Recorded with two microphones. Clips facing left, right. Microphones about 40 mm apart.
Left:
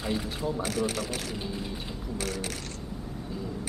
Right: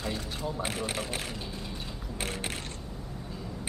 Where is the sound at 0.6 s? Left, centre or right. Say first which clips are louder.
Left 3 dB; right.